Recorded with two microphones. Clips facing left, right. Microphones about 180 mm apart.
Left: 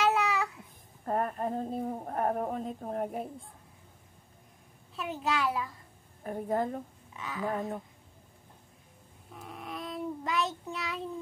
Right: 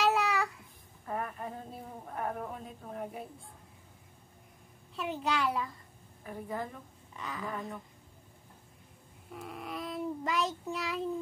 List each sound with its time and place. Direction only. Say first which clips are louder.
0.0 s babbling: left 1 dB; centre (ahead or behind)
1.0 s a sound: left 7 dB; 50° left (ahead or behind)
4.9 s a child's voice: left 1 dB; centre (ahead or behind)
6.2 s a woman's voice: left 7 dB; 50° left (ahead or behind)
7.2 s a child's voice: left 2 dB; centre (ahead or behind)
7.4 s a woman's voice: left 8 dB; 50° left (ahead or behind)
9.3 s child singing: right 1 dB; centre (ahead or behind)